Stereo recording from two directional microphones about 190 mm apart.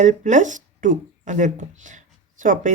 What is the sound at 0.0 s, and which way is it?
Speech, 40° right (ahead or behind).